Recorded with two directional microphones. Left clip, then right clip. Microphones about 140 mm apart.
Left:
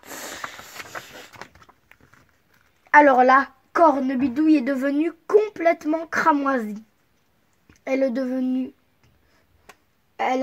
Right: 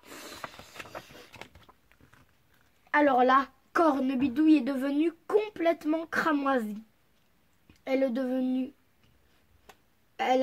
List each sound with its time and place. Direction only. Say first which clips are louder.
0.0 s a sound: left 9 dB; 65° left (ahead or behind)
1.3 s a sound: left 6 dB; 20° right (ahead or behind)
2.9 s speech: left 9 dB; 50° left (ahead or behind)
3.7 s a woman's voice: left 8 dB; 20° left (ahead or behind)
4.4 s speech: left 5 dB; 35° left (ahead or behind)
7.9 s speech: left 5 dB; 35° left (ahead or behind)
10.1 s speech: left 3 dB; 20° left (ahead or behind)